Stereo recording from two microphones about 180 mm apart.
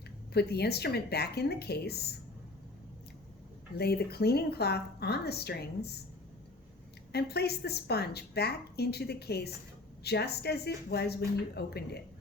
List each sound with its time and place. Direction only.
0.3 s a woman's voice: 65° left (ahead or behind)
3.8 s a woman's voice: 60° left (ahead or behind)
7.1 s a woman's voice: 65° left (ahead or behind)